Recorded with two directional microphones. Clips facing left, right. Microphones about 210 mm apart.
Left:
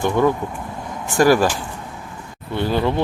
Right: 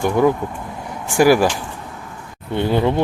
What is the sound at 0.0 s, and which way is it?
Speech, 10° right (ahead or behind).